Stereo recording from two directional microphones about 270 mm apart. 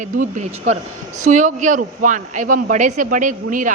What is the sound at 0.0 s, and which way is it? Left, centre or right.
A man's voice, right.